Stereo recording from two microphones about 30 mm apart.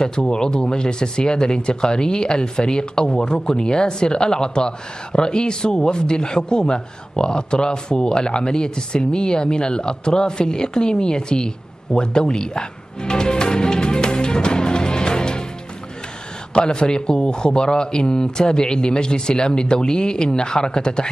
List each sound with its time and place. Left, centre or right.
0.0 s speech: left
16.5 s speech: left